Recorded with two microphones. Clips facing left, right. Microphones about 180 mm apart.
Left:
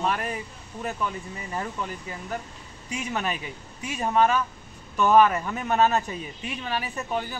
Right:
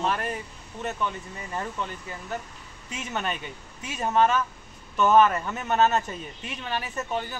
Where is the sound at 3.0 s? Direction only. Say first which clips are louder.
Left 1 dB; 5° left (ahead or behind).